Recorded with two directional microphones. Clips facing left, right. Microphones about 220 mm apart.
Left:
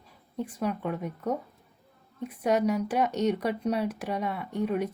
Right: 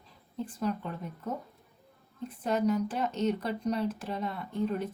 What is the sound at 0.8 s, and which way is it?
Speech, 70° left (ahead or behind).